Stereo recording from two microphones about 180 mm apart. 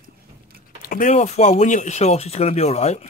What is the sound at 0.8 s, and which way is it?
Speech, 45° left (ahead or behind).